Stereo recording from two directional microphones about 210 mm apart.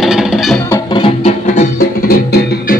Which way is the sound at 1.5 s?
40° left (ahead or behind).